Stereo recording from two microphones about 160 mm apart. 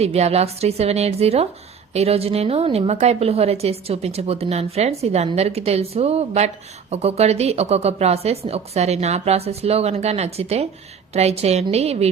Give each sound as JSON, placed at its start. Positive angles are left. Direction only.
{"t": 0.0, "sound": "a woman's voice", "side_deg": -40}